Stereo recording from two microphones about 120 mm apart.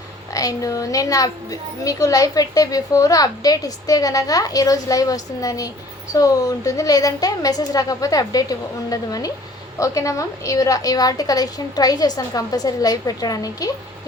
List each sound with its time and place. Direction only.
0.3 s a woman's voice: 30° left (ahead or behind)